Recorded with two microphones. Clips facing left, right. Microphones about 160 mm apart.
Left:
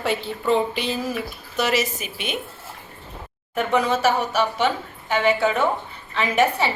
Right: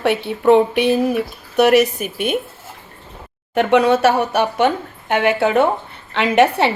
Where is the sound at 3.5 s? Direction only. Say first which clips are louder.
Right 7 dB; 70° right (ahead or behind).